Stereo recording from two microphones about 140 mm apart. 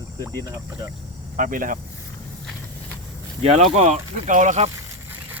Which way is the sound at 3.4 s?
50° right (ahead or behind).